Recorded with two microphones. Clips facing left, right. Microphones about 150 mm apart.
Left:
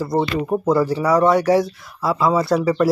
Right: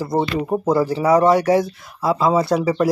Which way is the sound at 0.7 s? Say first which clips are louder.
Right 1 dB; 20° right (ahead or behind).